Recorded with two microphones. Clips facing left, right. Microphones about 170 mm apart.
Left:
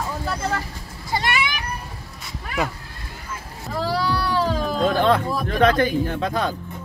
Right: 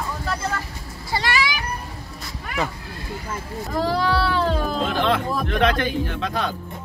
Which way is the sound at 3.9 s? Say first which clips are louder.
Even; 10° left (ahead or behind).